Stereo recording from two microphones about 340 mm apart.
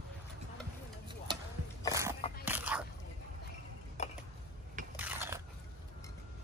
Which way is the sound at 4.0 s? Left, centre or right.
Centre.